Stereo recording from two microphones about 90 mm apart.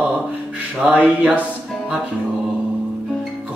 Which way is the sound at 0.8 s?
15° right (ahead or behind).